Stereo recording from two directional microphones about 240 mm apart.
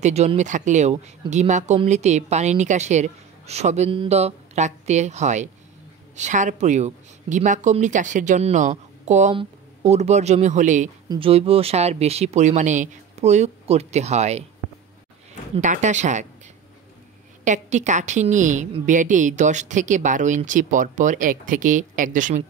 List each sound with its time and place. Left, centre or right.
0.0 s speech: right
15.5 s speech: right
17.5 s a woman's voice: right